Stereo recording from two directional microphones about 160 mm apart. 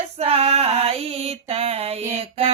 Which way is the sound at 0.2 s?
40° right (ahead or behind).